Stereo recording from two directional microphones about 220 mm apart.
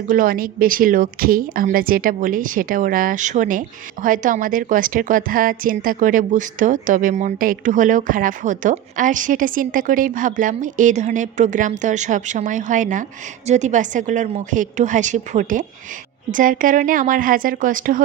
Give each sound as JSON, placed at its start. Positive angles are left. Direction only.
{"t": 0.1, "sound": "a woman's voice", "side_deg": -40}